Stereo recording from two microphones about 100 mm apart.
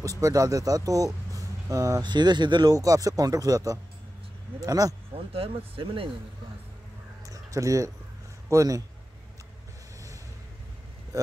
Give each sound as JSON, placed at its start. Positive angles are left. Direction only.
{"t": 0.0, "sound": "speech", "side_deg": -35}
{"t": 2.0, "sound": "speech", "side_deg": -45}
{"t": 2.7, "sound": "speech", "side_deg": -35}
{"t": 5.1, "sound": "speech", "side_deg": -65}
{"t": 7.2, "sound": "a sound", "side_deg": -35}
{"t": 8.5, "sound": "speech", "side_deg": -35}